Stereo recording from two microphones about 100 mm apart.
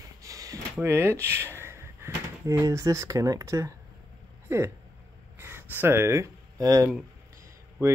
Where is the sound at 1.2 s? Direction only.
25° right (ahead or behind).